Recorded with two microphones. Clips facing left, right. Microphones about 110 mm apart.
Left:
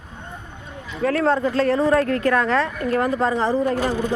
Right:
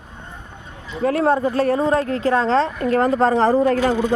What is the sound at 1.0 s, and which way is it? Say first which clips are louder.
Speech: right 2 dB; 25° right (ahead or behind).